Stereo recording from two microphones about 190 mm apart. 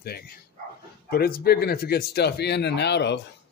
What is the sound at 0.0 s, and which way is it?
Speech, 55° left (ahead or behind).